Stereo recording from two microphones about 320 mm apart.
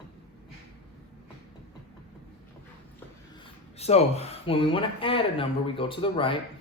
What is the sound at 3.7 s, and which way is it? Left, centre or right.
Speech, centre.